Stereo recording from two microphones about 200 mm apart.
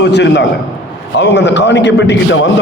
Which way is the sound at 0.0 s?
60° left (ahead or behind).